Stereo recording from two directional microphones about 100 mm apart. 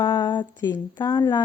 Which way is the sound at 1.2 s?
30° left (ahead or behind).